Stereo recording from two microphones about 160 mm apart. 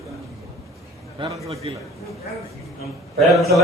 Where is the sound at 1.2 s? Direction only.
35° right (ahead or behind).